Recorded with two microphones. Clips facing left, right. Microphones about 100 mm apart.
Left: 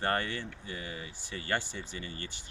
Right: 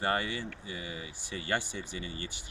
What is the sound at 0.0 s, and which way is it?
Speech, 15° right (ahead or behind).